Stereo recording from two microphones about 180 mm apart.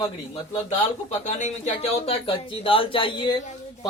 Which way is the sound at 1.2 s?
40° left (ahead or behind).